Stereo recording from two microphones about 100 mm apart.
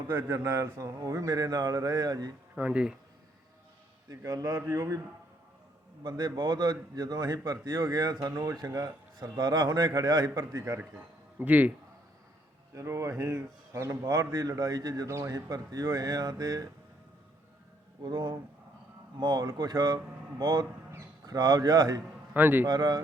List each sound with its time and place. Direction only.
0.1 s speech: 25° right (ahead or behind); by 2.3 s 40° right (ahead or behind)
2.6 s speech: 15° right (ahead or behind)
4.1 s speech: 35° right (ahead or behind)
6.0 s speech: 45° right (ahead or behind)
10.8 s speech: 15° right (ahead or behind)
12.7 s speech: 30° right (ahead or behind)
18.0 s speech: 45° right (ahead or behind)
22.4 s a man's voice: 20° right (ahead or behind)
22.6 s speech: 40° right (ahead or behind)